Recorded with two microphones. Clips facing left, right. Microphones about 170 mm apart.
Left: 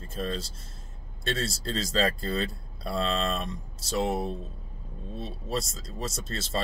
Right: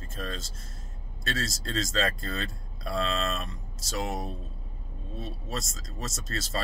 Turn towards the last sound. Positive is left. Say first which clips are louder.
# left 2 dB
turn(degrees=30)  # may be behind; listen again after turning